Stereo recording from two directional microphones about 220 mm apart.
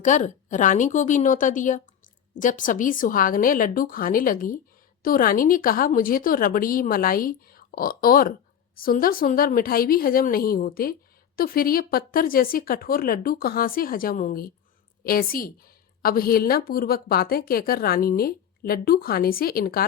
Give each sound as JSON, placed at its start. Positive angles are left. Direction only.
{"t": 0.0, "sound": "a woman's voice", "side_deg": 35}